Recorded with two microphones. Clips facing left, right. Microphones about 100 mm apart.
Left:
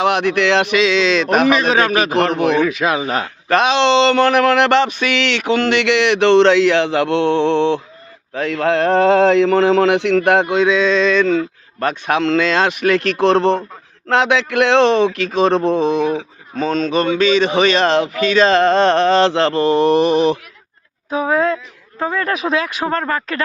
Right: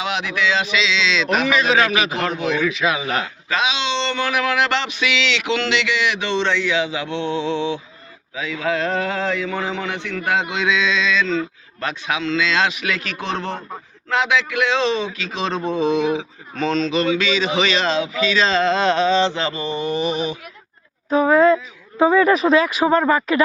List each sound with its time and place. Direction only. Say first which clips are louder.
0.0 s speech: left 7 dB; 60° left (ahead or behind)
2.6 s speech: left 4 dB; 45° left (ahead or behind)
3.5 s a sound: left 9 dB; 60° left (ahead or behind); by 4.4 s 85° left
4.4 s a sound: left 7 dB; 55° left (ahead or behind)
8.3 s a man's voice: left 6 dB; 65° left (ahead or behind)
10.5 s speech: left 6 dB; 45° left (ahead or behind)
14.1 s a sound: left 4 dB; 65° left (ahead or behind)
15.6 s a man's voice: left 5 dB; 75° left (ahead or behind)
16.6 s speech: left 3 dB; 45° left (ahead or behind)
19.1 s a man's voice: left 6 dB; 85° left; by 20.4 s 65° left (ahead or behind)
21.1 s speech: right 3 dB; centre (ahead or behind)